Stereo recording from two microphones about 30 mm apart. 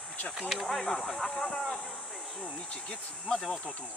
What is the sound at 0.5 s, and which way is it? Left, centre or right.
Speech, centre.